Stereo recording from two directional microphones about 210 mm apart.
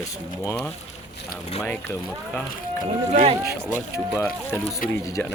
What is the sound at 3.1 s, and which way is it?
Speech, 30° right (ahead or behind).